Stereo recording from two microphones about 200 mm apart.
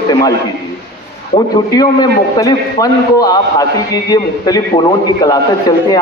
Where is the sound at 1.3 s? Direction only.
20° left (ahead or behind).